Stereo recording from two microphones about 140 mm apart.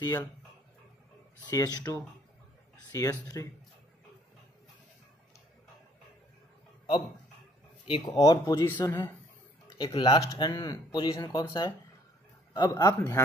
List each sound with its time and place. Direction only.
0.0 s speech: 25° left (ahead or behind)
1.4 s speech: 25° left (ahead or behind)
7.8 s speech: 35° left (ahead or behind)
8.1 s speech: 25° left (ahead or behind)